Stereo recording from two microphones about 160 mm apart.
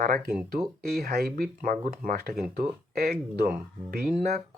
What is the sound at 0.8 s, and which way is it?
Speech, 75° right (ahead or behind).